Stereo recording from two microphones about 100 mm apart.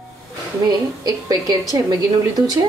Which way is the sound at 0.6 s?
40° right (ahead or behind).